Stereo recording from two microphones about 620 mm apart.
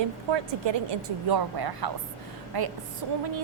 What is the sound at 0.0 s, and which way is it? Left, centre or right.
A woman's voice, right.